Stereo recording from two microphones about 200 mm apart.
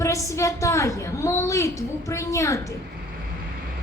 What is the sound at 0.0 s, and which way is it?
A woman's voice, 15° left (ahead or behind).